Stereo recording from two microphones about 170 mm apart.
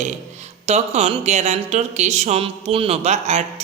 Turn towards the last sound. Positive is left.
turn(degrees=-40)  # may be behind; listen again after turning